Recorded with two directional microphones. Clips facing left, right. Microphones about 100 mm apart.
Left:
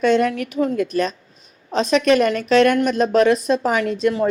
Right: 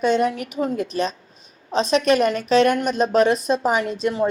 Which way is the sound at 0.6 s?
30° right (ahead or behind).